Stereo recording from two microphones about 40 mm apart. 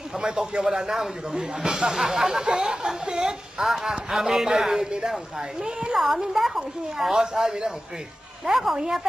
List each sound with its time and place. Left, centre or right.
0.1 s a woman's voice: centre
5.6 s speech: right
5.9 s a woman's voice: centre
8.5 s a woman's voice: centre